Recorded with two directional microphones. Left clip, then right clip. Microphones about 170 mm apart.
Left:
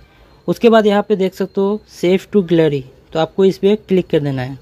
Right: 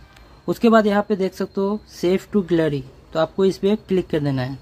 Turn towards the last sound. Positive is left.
turn(degrees=10)  # may be behind; listen again after turning